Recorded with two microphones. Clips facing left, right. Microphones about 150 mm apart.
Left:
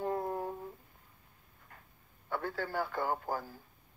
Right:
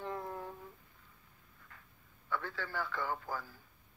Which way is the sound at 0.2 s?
40° left (ahead or behind).